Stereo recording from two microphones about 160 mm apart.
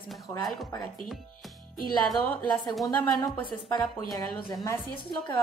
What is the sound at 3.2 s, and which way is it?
Speech, 25° left (ahead or behind).